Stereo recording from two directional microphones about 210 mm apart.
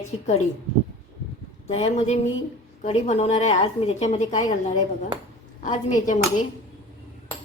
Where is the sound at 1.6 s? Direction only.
30° left (ahead or behind).